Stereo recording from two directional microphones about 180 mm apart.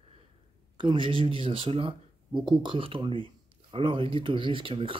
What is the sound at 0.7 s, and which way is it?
Speech, 25° right (ahead or behind).